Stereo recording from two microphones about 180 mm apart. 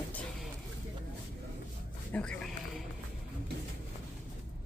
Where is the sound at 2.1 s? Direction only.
5° left (ahead or behind).